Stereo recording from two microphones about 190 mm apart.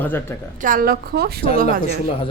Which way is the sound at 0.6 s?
50° right (ahead or behind).